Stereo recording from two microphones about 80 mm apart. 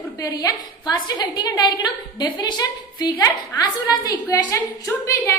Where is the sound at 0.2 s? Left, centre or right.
Left.